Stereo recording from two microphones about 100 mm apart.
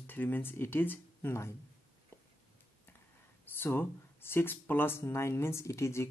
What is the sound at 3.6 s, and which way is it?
Speech, 25° left (ahead or behind).